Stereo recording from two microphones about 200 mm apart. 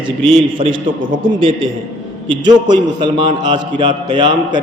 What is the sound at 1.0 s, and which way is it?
Speech, 45° right (ahead or behind).